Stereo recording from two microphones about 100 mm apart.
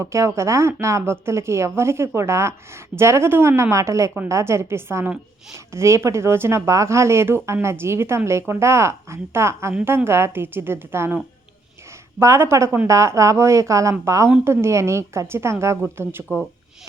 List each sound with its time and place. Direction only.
0.0 s speech: 30° right (ahead or behind)
12.2 s speech: 25° right (ahead or behind)